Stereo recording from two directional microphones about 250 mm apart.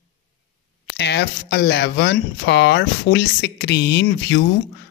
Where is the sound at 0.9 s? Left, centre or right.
Left.